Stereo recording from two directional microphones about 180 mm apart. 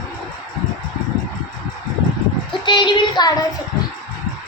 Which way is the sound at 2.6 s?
25° left (ahead or behind).